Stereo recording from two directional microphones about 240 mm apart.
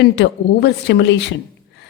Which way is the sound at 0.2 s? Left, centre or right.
Left.